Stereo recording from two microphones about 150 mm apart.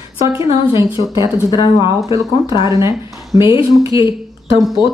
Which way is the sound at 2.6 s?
20° right (ahead or behind).